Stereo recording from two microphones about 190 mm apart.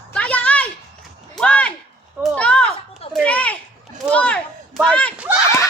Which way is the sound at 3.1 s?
5° left (ahead or behind).